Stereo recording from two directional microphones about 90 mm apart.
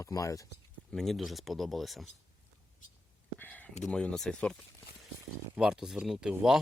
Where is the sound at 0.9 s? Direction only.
5° left (ahead or behind).